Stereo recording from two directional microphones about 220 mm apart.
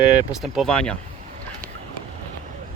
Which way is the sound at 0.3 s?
Centre (ahead or behind).